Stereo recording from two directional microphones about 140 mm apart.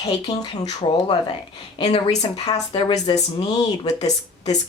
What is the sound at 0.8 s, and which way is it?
Speech, 45° left (ahead or behind).